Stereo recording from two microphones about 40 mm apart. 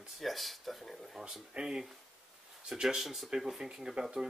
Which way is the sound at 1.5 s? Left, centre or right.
Centre.